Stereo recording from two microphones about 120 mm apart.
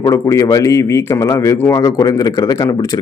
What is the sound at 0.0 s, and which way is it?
A man's voice, 30° left (ahead or behind).